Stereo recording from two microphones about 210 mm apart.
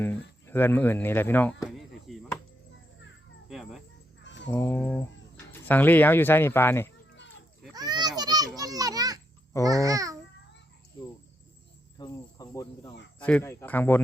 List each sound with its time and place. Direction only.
0.0 s a sound: 10° left (ahead or behind)
3.5 s music: centre (ahead or behind)
4.2 s a sound: 60° left (ahead or behind)
4.4 s speech: 10° left (ahead or behind)
7.7 s children playing: 20° right (ahead or behind)
9.6 s a child's voice: 15° right (ahead or behind)
11.9 s cricket: 20° left (ahead or behind)
13.2 s speech: 10° left (ahead or behind)